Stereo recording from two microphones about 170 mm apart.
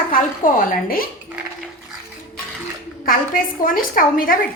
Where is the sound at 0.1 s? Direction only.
55° left (ahead or behind).